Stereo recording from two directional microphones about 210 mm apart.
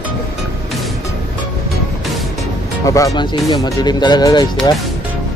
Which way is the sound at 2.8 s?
15° left (ahead or behind).